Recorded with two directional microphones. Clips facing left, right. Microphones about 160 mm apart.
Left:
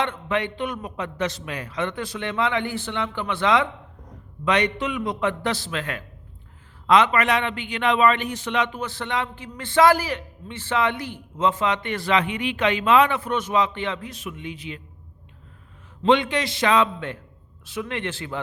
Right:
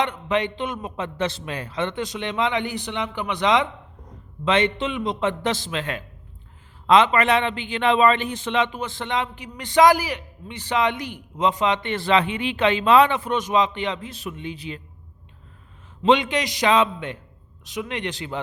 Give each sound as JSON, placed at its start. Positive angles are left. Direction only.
{"t": 0.0, "sound": "a man's voice", "side_deg": -20}
{"t": 13.1, "sound": "a man's voice", "side_deg": -20}
{"t": 14.1, "sound": "a man's voice", "side_deg": -35}
{"t": 16.0, "sound": "a man's voice", "side_deg": -20}